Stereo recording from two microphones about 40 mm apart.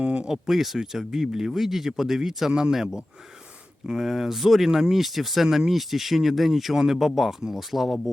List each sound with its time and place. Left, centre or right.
0.0 s a sound: right
0.3 s speech: centre
3.8 s speech: centre